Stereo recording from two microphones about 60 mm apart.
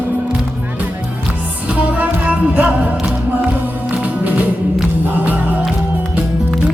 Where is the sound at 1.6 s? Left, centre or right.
Right.